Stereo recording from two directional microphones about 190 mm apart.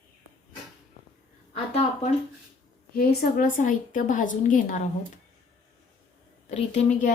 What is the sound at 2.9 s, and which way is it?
A woman's voice, 45° left (ahead or behind).